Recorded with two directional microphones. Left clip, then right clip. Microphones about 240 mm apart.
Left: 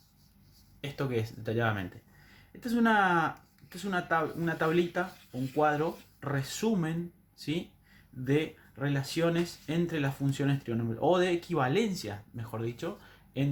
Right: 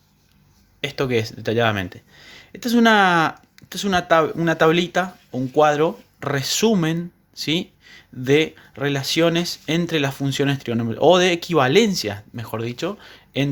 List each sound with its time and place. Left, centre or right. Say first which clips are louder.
0.8 s speech: right 12 dB; right
8.2 s speech: right 13 dB; right